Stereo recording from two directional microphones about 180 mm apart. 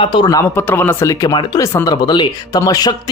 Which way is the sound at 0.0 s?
25° left (ahead or behind).